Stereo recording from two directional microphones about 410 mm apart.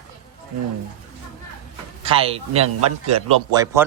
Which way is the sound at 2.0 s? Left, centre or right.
Centre.